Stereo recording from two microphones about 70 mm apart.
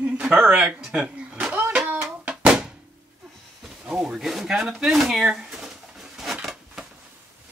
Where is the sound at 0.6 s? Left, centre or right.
Centre.